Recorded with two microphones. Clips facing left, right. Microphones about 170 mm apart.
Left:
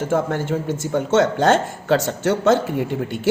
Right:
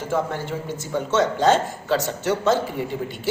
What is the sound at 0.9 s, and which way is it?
A woman's voice, 60° left (ahead or behind).